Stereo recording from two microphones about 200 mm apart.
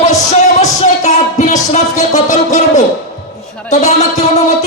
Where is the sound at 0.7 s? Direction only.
35° left (ahead or behind).